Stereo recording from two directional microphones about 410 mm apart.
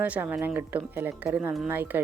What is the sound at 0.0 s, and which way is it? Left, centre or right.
Speech, centre.